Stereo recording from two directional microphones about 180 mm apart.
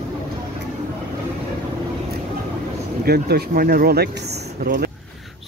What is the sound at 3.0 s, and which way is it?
Speech, 60° right (ahead or behind).